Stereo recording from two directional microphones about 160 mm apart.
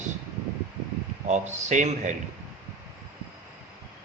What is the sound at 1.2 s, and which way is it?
Speech, 45° right (ahead or behind).